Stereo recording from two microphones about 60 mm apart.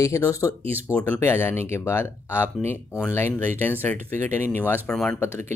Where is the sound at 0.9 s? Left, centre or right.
Left.